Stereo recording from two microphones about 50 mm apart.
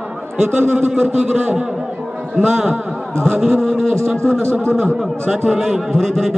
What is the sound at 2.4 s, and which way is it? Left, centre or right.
A man's voice, centre.